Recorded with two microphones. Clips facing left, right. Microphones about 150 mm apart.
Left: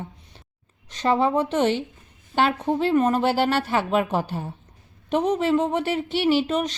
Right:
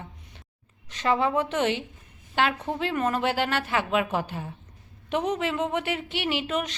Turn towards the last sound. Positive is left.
turn(degrees=35)  # may be behind; listen again after turning